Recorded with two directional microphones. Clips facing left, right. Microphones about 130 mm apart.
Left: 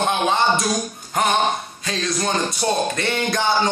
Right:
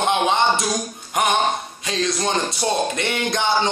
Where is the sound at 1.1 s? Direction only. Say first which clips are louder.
Even; 15° right (ahead or behind).